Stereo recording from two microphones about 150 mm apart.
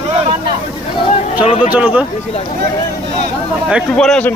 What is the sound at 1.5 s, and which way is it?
Speech, 50° left (ahead or behind).